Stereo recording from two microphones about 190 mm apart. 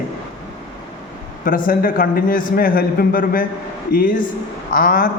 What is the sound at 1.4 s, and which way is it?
A man's voice, 50° left (ahead or behind).